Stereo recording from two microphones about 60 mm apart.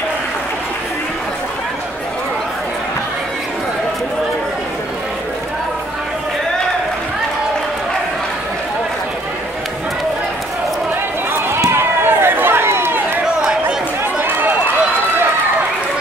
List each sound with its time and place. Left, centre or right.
11.7 s run: right
13.2 s chatter: centre
14.2 s run: right